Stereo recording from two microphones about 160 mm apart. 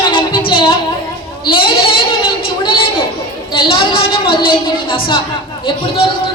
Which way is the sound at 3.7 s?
30° left (ahead or behind).